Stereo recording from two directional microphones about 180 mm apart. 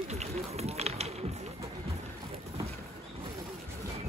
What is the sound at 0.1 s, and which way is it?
Run, 35° right (ahead or behind).